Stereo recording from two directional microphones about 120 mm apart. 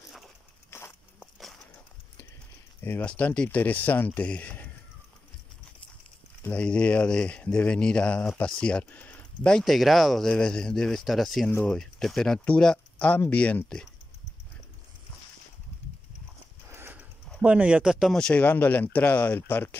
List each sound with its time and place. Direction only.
0.7 s walk: 20° left (ahead or behind)
1.2 s a sound: centre (ahead or behind)
2.8 s speech: 15° left (ahead or behind)
6.4 s speech: 10° left (ahead or behind)
11.4 s speech: 10° left (ahead or behind)
16.7 s horse: 20° right (ahead or behind)
17.4 s speech: 10° right (ahead or behind)
18.2 s speech: 10° left (ahead or behind)